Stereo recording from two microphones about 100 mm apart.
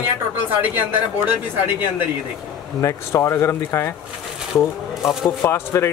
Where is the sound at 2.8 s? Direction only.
30° left (ahead or behind).